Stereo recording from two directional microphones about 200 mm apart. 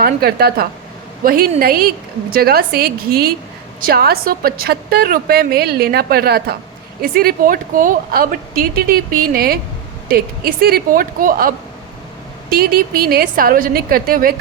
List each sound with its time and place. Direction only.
0.0 s a woman's voice: 50° right (ahead or behind)